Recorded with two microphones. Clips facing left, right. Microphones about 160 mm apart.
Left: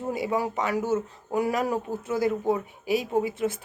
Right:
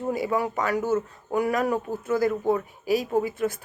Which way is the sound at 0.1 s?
25° left (ahead or behind).